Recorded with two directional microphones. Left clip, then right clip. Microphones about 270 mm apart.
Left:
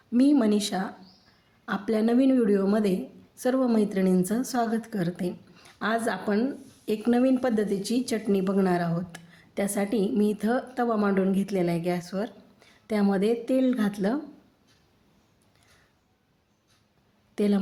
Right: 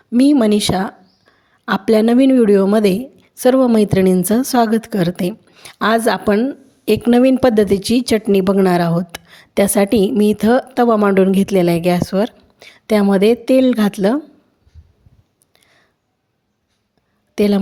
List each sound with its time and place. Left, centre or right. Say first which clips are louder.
0.1 s a woman's voice: right 10 dB; right
17.3 s a woman's voice: right 11 dB; right